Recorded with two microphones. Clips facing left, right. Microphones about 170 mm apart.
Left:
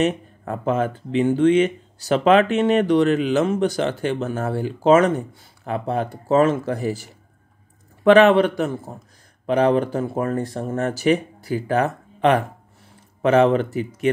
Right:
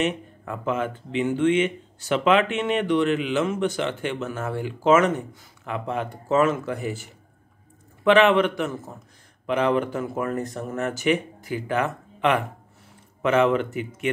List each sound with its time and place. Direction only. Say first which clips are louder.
0.0 s speech: left 4 dB; 40° left (ahead or behind)